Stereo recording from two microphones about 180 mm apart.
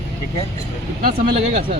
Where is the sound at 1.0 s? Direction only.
55° right (ahead or behind).